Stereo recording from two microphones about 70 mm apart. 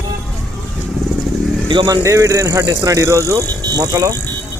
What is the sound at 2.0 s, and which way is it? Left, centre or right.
Speech, right.